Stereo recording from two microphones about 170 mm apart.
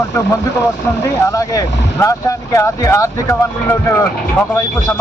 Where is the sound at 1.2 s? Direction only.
20° left (ahead or behind).